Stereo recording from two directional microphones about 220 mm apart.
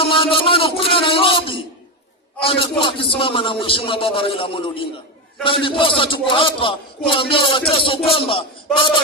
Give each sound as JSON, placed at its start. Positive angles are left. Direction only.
{"t": 0.0, "sound": "a man's voice", "side_deg": 25}